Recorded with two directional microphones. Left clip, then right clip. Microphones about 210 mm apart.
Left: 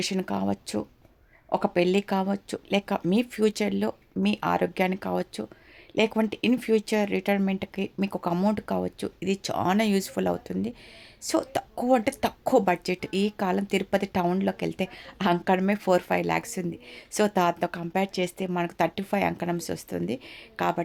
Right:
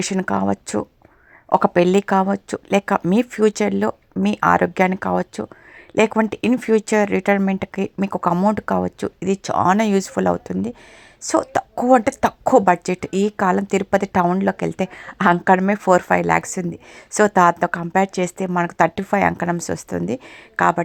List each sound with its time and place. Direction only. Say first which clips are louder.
0.0 s a woman's voice: right 8 dB; 25° right (ahead or behind)